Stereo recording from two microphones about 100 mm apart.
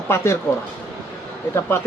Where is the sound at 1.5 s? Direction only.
25° left (ahead or behind).